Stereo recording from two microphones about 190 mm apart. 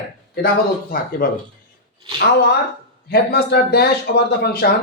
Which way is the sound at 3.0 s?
55° left (ahead or behind).